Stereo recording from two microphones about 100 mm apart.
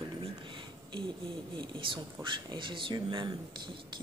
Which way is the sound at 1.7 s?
50° right (ahead or behind).